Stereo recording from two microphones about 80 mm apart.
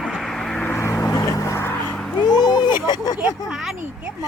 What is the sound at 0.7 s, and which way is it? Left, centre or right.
Vehicle, left.